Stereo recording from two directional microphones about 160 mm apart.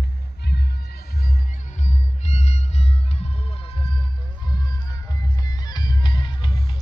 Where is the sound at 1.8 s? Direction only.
45° left (ahead or behind).